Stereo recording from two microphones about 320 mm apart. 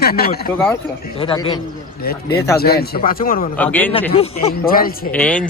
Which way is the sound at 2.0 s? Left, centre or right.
Left.